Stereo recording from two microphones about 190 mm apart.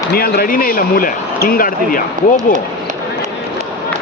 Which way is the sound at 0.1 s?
50° left (ahead or behind).